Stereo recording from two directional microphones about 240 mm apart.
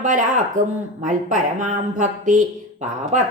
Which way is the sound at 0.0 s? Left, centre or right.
Right.